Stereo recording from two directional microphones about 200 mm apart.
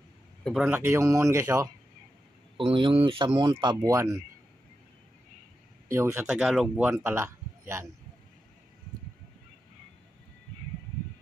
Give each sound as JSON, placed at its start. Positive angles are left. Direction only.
{"t": 0.4, "sound": "speech", "side_deg": 5}
{"t": 0.7, "sound": "speech", "side_deg": -10}
{"t": 2.5, "sound": "speech", "side_deg": -25}
{"t": 5.9, "sound": "speech", "side_deg": -10}